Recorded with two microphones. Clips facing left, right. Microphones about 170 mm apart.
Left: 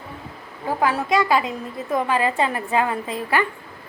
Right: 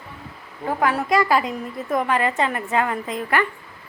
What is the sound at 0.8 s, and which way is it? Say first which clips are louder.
Speech: even; 25° left (ahead or behind).